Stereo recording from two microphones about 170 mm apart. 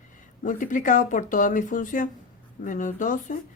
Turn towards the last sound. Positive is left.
turn(degrees=50)  # may be behind; listen again after turning